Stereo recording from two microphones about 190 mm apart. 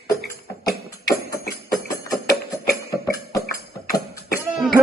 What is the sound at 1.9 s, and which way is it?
Music, 15° left (ahead or behind).